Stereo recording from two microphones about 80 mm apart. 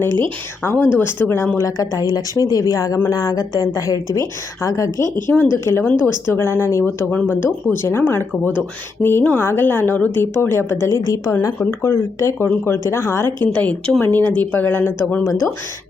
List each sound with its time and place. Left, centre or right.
0.6 s a woman's voice: left
1.5 s a woman's voice: left
5.2 s a woman's voice: left
13.4 s a woman's voice: left